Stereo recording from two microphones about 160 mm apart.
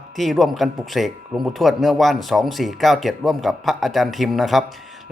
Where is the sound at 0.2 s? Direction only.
Centre (ahead or behind).